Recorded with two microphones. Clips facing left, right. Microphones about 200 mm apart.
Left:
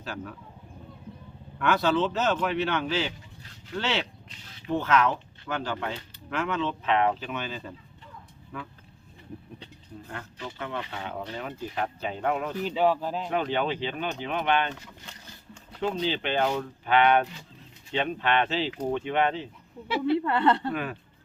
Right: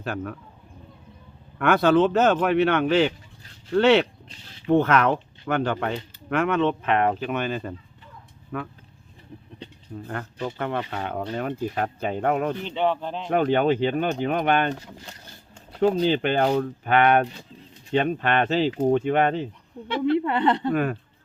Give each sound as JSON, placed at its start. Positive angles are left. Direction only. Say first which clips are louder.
{"t": 0.0, "sound": "speech", "louder": "right 7 dB", "side_deg": -55}
{"t": 1.5, "sound": "speech", "louder": "right 6 dB", "side_deg": -55}
{"t": 9.9, "sound": "speech", "louder": "right 7 dB", "side_deg": -55}
{"t": 12.6, "sound": "speech", "louder": "even", "side_deg": 5}
{"t": 13.3, "sound": "speech", "louder": "right 9 dB", "side_deg": -50}
{"t": 14.8, "sound": "speech", "louder": "right 5 dB", "side_deg": -35}
{"t": 20.1, "sound": "a woman's voice", "louder": "right 2 dB", "side_deg": -20}
{"t": 20.7, "sound": "speech", "louder": "right 8 dB", "side_deg": -50}